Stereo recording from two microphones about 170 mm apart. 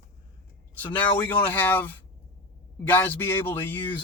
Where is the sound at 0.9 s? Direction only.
10° left (ahead or behind).